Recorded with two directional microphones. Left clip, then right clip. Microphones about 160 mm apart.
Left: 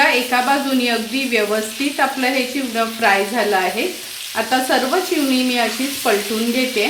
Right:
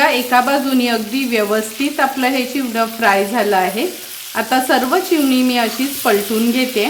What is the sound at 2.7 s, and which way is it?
Speech, 55° right (ahead or behind).